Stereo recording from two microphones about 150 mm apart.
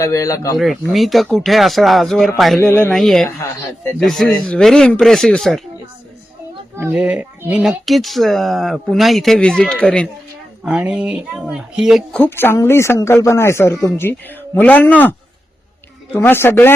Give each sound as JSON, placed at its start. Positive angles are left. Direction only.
{"t": 0.0, "sound": "speech", "side_deg": 20}
{"t": 0.5, "sound": "speech", "side_deg": 0}
{"t": 6.9, "sound": "speech", "side_deg": -5}
{"t": 10.6, "sound": "speech", "side_deg": -5}
{"t": 12.2, "sound": "speech", "side_deg": 15}
{"t": 16.1, "sound": "speech", "side_deg": 15}